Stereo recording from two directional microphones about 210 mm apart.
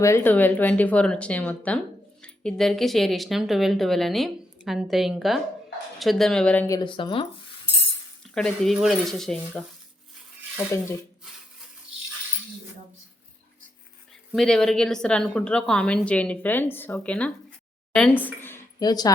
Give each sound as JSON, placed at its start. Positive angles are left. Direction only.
{"t": 0.0, "sound": "a woman's voice", "side_deg": 10}
{"t": 6.7, "sound": "speech", "side_deg": 25}
{"t": 8.2, "sound": "a woman's voice", "side_deg": 0}
{"t": 14.3, "sound": "a woman's voice", "side_deg": 5}
{"t": 18.4, "sound": "a sound", "side_deg": 15}